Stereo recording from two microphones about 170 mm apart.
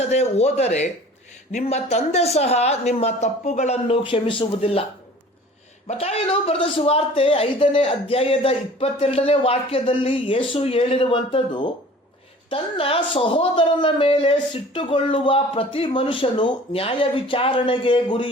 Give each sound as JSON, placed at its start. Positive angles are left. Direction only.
{"t": 0.0, "sound": "a man's voice", "side_deg": 40}
{"t": 5.9, "sound": "a man's voice", "side_deg": 40}